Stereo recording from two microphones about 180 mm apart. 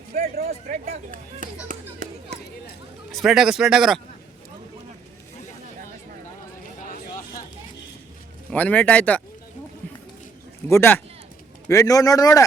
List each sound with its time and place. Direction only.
0.1 s speech: 50° right (ahead or behind)
0.4 s speech: 35° right (ahead or behind)
3.1 s a man's voice: centre (ahead or behind)
6.7 s a sound: 50° left (ahead or behind)
8.4 s speech: 10° left (ahead or behind)
9.8 s a sound: 10° left (ahead or behind)
10.7 s speech: 10° left (ahead or behind)